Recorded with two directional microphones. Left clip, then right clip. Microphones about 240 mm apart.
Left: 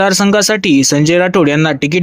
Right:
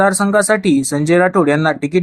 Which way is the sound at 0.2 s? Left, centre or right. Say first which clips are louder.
Left 2 dB; left.